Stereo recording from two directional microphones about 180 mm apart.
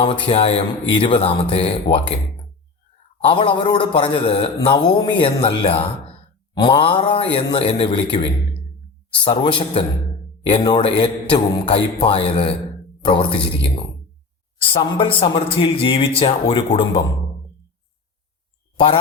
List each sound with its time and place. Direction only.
0.0 s speech: 30° left (ahead or behind)
3.2 s a man's voice: 30° left (ahead or behind)
9.2 s a man's voice: 25° left (ahead or behind)
14.7 s a man's voice: 30° left (ahead or behind)